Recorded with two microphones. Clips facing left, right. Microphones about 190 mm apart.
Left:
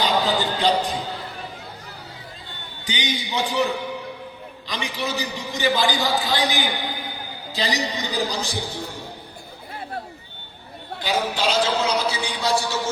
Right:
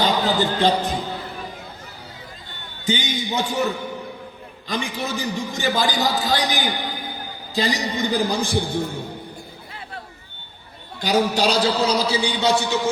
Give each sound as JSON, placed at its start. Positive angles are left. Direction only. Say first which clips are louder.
{"t": 0.0, "sound": "a sound", "louder": "right 2 dB", "side_deg": -45}
{"t": 2.8, "sound": "a man's voice", "louder": "right 4 dB", "side_deg": -45}
{"t": 11.0, "sound": "a man's voice", "louder": "right 4 dB", "side_deg": -40}